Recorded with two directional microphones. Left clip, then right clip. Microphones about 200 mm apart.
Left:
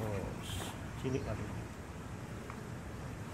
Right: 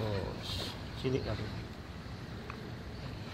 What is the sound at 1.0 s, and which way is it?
Speech, 30° right (ahead or behind).